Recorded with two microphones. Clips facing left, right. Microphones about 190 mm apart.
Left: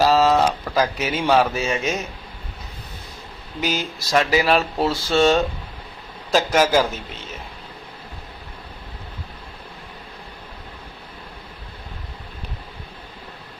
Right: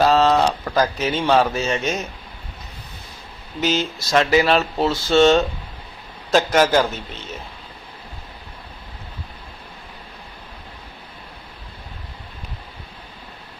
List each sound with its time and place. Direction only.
0.0 s a sound: 5° left (ahead or behind)
1.1 s speech: 10° left (ahead or behind)
3.6 s a man's voice: 10° left (ahead or behind)